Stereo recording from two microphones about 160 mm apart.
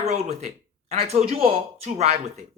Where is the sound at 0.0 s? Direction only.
45° right (ahead or behind).